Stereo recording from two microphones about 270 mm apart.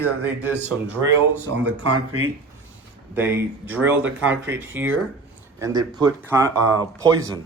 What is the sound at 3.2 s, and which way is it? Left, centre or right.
Speech, centre.